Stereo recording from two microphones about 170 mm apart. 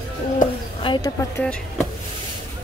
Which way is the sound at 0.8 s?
30° left (ahead or behind).